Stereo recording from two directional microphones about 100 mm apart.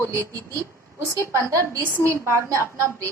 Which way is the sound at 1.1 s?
30° right (ahead or behind).